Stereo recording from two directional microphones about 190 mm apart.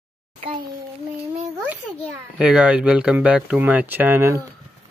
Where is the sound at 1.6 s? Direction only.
10° right (ahead or behind).